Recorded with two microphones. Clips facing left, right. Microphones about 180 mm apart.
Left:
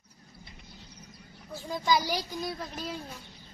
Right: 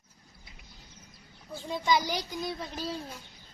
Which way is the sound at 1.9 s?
20° right (ahead or behind).